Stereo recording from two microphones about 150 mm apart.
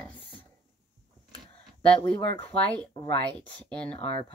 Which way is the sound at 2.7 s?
10° left (ahead or behind).